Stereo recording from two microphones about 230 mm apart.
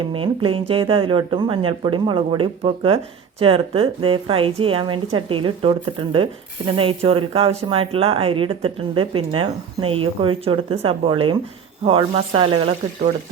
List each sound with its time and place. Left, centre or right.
0.0 s speech: right